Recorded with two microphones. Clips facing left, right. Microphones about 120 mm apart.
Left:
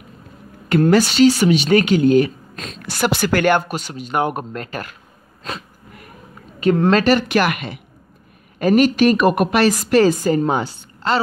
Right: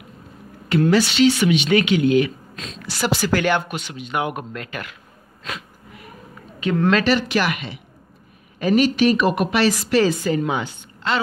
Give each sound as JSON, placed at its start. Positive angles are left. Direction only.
{"t": 0.7, "sound": "speech", "side_deg": 50}
{"t": 5.4, "sound": "a sound", "side_deg": 40}
{"t": 6.6, "sound": "a woman's voice", "side_deg": 40}